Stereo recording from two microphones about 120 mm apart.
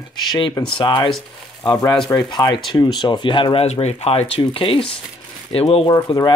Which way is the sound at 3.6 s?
60° left (ahead or behind).